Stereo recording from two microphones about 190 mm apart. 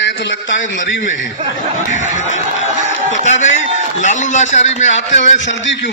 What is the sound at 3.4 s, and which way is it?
A man's voice, 40° left (ahead or behind).